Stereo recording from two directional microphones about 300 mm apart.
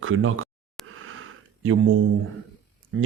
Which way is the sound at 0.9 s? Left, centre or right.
Right.